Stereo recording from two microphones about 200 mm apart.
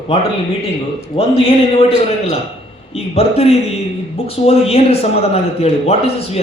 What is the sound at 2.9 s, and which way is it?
A man's voice, 30° left (ahead or behind).